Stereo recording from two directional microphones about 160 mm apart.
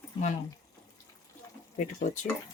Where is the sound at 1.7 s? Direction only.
50° left (ahead or behind).